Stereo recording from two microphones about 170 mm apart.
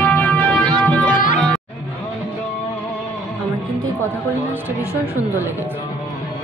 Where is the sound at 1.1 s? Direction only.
50° left (ahead or behind).